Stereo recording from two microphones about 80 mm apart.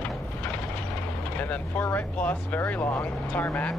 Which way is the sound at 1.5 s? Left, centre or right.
Left.